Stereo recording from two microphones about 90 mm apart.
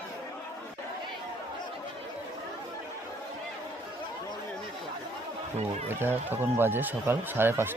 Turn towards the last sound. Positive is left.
turn(degrees=-25)  # may be behind; listen again after turning